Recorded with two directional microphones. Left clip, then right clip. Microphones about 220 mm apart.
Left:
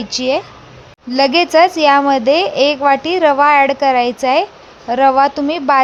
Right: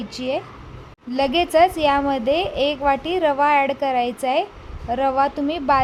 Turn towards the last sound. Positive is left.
turn(degrees=10)  # may be behind; listen again after turning